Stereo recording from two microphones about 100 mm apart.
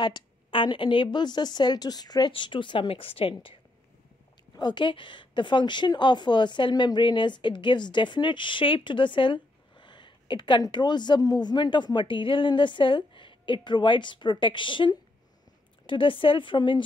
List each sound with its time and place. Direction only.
0.0 s a woman's voice: 50° left (ahead or behind)
4.6 s a woman's voice: 50° left (ahead or behind)